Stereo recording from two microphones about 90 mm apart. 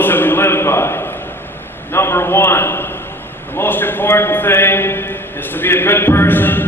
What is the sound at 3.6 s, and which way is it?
A man's voice, 20° left (ahead or behind).